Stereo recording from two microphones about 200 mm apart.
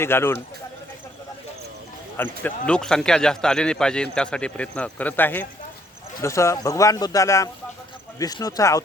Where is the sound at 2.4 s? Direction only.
5° left (ahead or behind).